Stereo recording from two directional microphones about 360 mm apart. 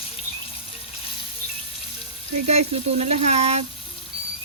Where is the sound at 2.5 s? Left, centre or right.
Centre.